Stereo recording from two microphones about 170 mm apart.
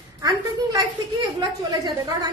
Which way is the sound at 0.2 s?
25° right (ahead or behind).